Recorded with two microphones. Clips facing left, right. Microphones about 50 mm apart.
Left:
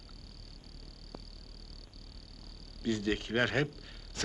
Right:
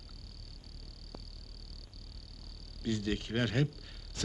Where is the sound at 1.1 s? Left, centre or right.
Left.